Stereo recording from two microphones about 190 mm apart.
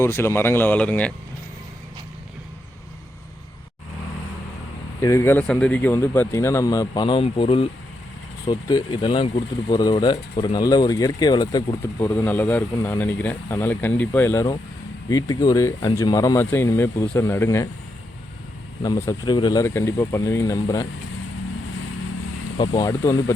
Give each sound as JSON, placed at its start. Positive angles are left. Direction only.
{"t": 0.0, "sound": "speech", "side_deg": 10}
{"t": 4.9, "sound": "speech", "side_deg": 15}
{"t": 18.8, "sound": "speech", "side_deg": 15}
{"t": 22.5, "sound": "speech", "side_deg": 20}